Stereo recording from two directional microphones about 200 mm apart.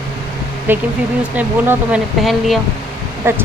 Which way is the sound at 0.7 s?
10° right (ahead or behind).